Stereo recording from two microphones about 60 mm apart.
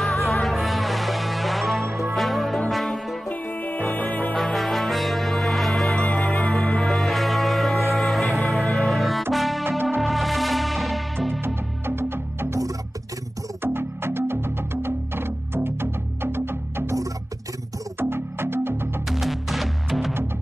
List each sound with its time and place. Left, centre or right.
0.0 s music: centre
3.3 s music: left
4.4 s music: centre
6.0 s music: centre
7.1 s music: centre
11.4 s music: right
13.7 s music: right
17.9 s music: right
19.0 s music: centre